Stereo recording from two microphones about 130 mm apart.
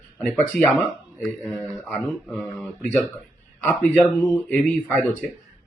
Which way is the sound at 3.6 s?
10° left (ahead or behind).